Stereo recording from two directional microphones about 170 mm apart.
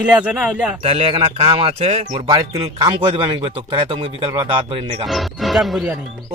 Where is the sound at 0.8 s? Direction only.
35° right (ahead or behind).